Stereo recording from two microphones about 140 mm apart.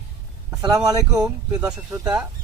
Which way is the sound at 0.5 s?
25° right (ahead or behind).